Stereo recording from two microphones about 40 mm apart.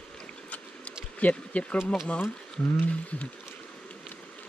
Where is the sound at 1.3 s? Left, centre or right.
Left.